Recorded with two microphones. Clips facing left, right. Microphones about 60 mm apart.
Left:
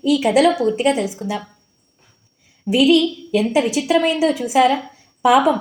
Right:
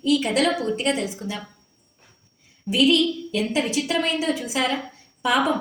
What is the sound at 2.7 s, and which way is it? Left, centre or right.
A woman's voice, centre.